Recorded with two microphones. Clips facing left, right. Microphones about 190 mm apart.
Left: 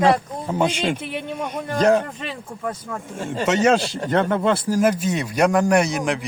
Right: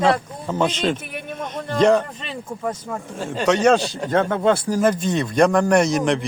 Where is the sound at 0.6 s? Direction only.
10° left (ahead or behind).